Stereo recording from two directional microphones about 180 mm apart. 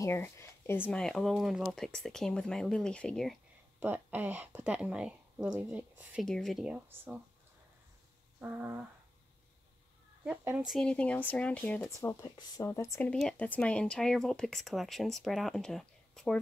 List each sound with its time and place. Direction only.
0.0 s speech: 15° left (ahead or behind)
3.8 s speech: 10° right (ahead or behind)
8.4 s speech: 10° right (ahead or behind)
10.2 s speech: 10° right (ahead or behind)
10.7 s speech: 5° left (ahead or behind)
13.1 s speech: 5° left (ahead or behind)